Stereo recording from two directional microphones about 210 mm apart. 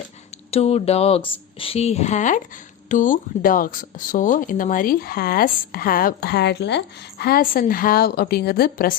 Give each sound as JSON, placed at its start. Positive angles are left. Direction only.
{"t": 0.5, "sound": "speech", "side_deg": 30}